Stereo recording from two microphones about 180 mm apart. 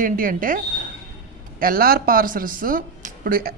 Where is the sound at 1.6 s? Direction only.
55° right (ahead or behind).